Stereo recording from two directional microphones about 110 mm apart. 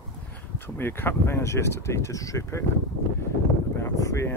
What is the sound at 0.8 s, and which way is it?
Speech, 20° left (ahead or behind).